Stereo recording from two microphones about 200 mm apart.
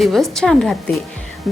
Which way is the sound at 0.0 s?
Centre (ahead or behind).